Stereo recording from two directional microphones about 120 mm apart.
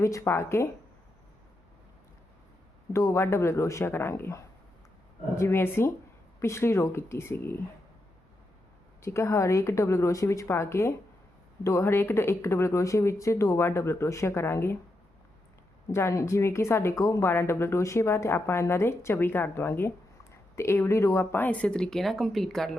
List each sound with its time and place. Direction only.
0.0 s a woman's voice: 25° left (ahead or behind)
2.9 s a woman's voice: 25° left (ahead or behind)
9.0 s a woman's voice: 20° left (ahead or behind)
15.9 s a woman's voice: 25° left (ahead or behind); by 22.8 s 5° left (ahead or behind)